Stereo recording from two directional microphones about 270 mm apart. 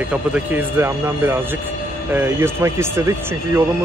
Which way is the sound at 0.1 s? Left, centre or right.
Centre.